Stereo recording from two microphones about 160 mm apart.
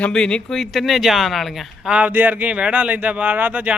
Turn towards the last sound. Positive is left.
turn(degrees=-10)  # may be behind; listen again after turning